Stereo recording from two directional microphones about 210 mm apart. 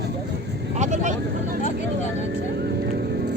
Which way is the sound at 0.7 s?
35° right (ahead or behind).